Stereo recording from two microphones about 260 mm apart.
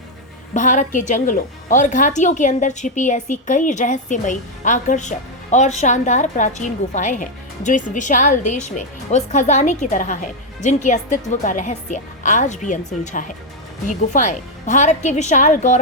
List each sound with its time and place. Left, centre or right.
0.5 s a woman's voice: left